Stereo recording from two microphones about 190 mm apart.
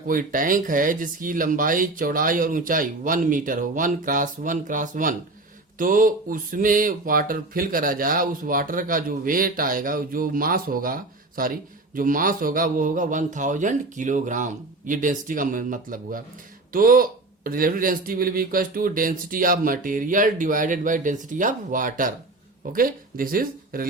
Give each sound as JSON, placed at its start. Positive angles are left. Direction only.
{"t": 0.1, "sound": "speech", "side_deg": -45}